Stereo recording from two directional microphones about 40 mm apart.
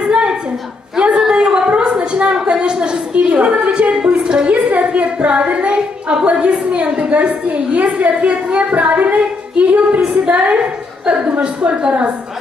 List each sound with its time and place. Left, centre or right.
0.0 s a sound: right
2.3 s a woman's voice: right
4.6 s a woman's voice: right
9.2 s singing: right
10.2 s a woman's voice: right